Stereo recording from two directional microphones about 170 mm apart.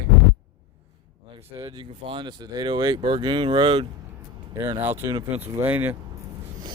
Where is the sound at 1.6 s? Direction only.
25° right (ahead or behind).